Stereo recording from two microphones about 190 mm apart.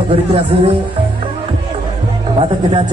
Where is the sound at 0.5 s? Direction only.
30° right (ahead or behind).